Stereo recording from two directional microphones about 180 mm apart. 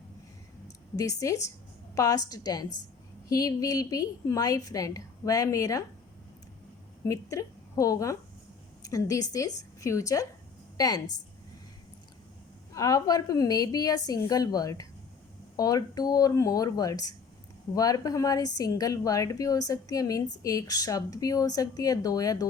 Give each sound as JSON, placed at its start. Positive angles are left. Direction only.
{"t": 0.9, "sound": "a woman's voice", "side_deg": 20}
{"t": 7.0, "sound": "a woman's voice", "side_deg": 15}
{"t": 12.7, "sound": "a woman's voice", "side_deg": 20}